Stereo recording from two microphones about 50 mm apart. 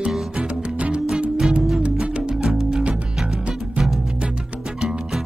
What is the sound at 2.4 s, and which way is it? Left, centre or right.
Music, centre.